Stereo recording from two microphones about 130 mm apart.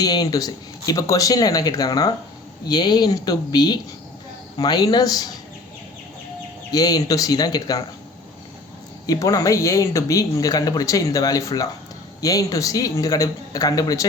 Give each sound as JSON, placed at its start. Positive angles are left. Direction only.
{"t": 0.0, "sound": "speech", "side_deg": 30}
{"t": 6.7, "sound": "speech", "side_deg": 30}
{"t": 9.0, "sound": "speech", "side_deg": 25}